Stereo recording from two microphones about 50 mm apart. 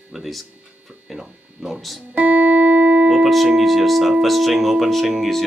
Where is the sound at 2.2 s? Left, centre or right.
Right.